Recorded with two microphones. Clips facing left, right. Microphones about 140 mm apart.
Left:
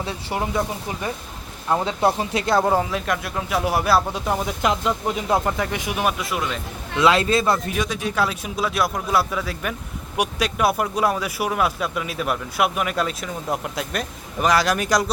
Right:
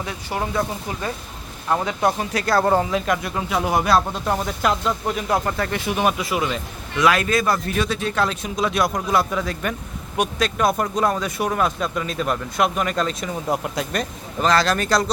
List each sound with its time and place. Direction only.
0.0 s speech: 25° left (ahead or behind)
2.6 s speech: 5° left (ahead or behind)
6.0 s speech: centre (ahead or behind)
6.9 s speech: 25° left (ahead or behind)
7.7 s speech: 10° left (ahead or behind)